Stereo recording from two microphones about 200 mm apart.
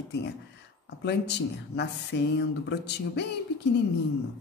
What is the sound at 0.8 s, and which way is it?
Speech, 60° left (ahead or behind).